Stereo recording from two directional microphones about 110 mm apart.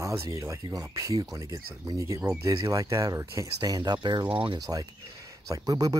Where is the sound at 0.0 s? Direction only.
30° right (ahead or behind).